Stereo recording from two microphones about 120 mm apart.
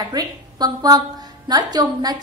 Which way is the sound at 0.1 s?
35° right (ahead or behind).